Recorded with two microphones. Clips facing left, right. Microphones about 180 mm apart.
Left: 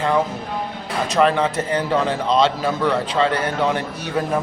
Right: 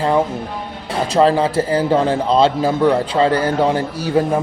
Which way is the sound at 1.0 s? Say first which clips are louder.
Right 3 dB; 30° right (ahead or behind).